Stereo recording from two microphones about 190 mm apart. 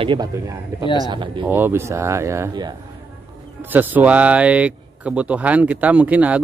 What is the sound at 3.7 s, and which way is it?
Speech, 10° right (ahead or behind).